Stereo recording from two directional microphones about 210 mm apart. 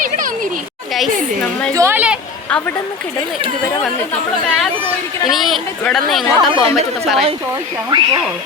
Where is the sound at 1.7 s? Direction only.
10° right (ahead or behind).